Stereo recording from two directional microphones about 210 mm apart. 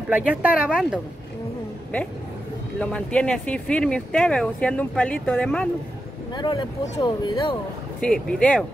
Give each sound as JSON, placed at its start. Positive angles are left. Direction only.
{"t": 0.1, "sound": "speech", "side_deg": -5}
{"t": 2.8, "sound": "speech", "side_deg": 5}
{"t": 6.3, "sound": "speech", "side_deg": 20}
{"t": 8.0, "sound": "speech", "side_deg": 5}